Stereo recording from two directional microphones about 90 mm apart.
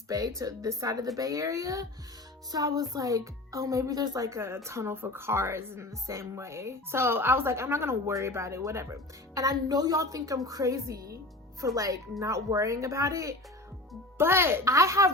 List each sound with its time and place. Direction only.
0.1 s a woman's voice: 40° right (ahead or behind)
2.5 s music: 45° right (ahead or behind)
2.9 s a woman's voice: 40° right (ahead or behind)